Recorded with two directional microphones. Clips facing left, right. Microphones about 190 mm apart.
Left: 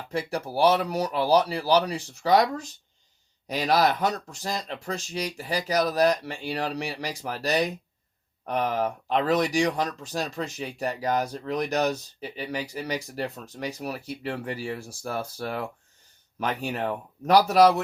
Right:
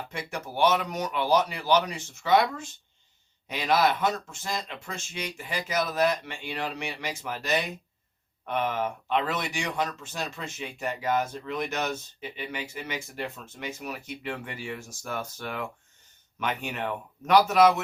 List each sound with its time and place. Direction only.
0.1 s speech: 35° left (ahead or behind)